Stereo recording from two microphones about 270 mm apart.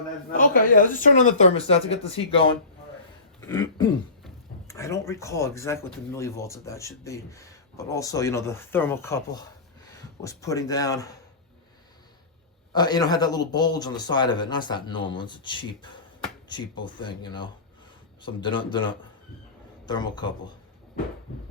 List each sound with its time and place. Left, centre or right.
0.3 s speech: left
3.4 s throat clearing: centre
4.7 s speech: centre
12.7 s a man's voice: centre